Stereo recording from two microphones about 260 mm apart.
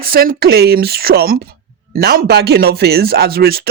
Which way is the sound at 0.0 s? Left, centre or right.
Right.